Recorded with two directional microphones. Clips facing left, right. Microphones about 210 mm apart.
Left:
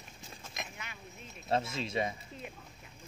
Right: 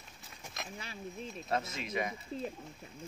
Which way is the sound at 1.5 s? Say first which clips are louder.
Left 3 dB; 30° left (ahead or behind).